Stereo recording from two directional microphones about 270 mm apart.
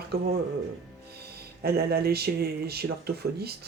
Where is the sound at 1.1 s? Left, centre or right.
Right.